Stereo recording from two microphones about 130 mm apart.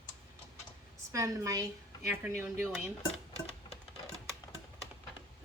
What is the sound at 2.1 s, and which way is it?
Speech, 15° right (ahead or behind).